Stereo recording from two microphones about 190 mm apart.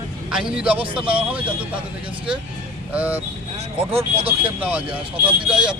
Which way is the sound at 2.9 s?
10° right (ahead or behind).